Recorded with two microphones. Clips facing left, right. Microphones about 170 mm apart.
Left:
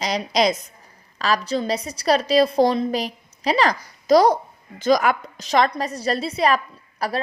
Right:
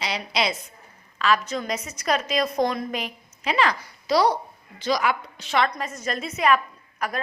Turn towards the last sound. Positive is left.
turn(degrees=35)  # may be behind; listen again after turning